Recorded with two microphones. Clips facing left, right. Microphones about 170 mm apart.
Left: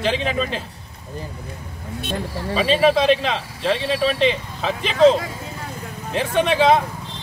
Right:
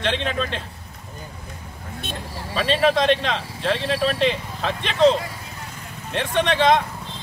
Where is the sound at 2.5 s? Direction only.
5° left (ahead or behind).